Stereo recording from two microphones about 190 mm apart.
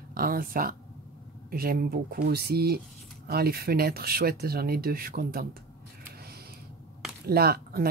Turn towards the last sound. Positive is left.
turn(degrees=-55)  # may be behind; listen again after turning